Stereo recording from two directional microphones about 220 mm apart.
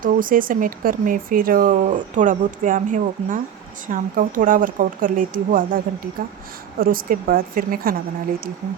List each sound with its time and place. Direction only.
0.0 s speech: 40° right (ahead or behind)